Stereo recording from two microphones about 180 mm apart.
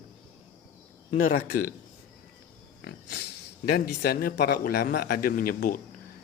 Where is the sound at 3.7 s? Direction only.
65° left (ahead or behind).